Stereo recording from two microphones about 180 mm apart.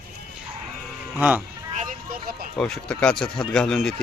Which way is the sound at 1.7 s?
45° right (ahead or behind).